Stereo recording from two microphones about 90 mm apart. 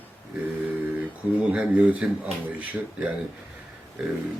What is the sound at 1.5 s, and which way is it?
Speech, 15° right (ahead or behind).